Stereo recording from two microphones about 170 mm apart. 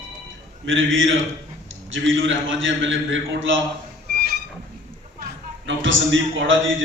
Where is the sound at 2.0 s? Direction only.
90° right.